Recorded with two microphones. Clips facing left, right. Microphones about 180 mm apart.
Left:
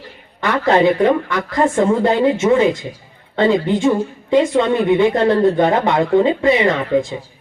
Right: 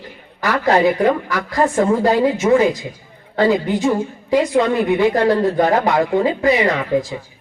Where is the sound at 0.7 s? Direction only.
25° left (ahead or behind).